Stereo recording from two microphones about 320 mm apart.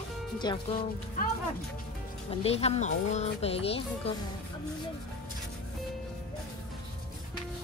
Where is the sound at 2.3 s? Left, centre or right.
Centre.